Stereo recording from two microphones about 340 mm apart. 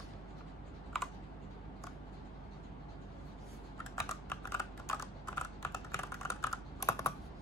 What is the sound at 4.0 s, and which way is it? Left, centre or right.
Typing, centre.